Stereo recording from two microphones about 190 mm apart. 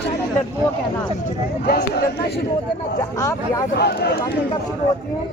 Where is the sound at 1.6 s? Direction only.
55° left (ahead or behind).